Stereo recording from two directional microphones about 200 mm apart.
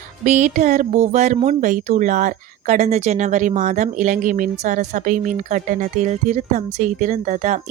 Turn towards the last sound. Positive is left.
turn(degrees=-40)  # may be behind; listen again after turning